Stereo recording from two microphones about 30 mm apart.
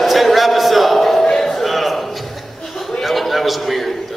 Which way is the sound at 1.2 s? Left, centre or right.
Centre.